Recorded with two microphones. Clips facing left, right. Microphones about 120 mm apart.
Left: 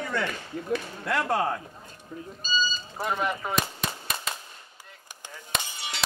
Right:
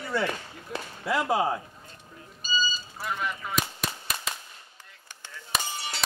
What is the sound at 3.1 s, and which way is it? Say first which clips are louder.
Cap gun: left 4 dB; 45° left (ahead or behind).